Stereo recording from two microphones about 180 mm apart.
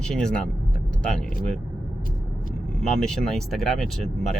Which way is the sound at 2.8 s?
5° left (ahead or behind).